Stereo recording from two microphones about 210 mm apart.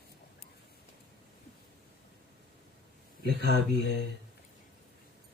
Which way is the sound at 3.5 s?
55° left (ahead or behind).